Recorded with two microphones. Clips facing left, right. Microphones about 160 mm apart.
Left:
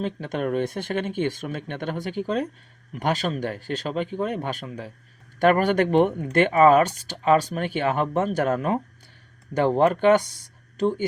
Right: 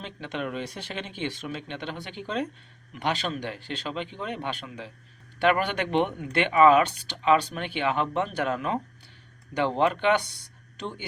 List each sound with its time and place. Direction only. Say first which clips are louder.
0.0 s speech: left 6 dB; 40° left (ahead or behind)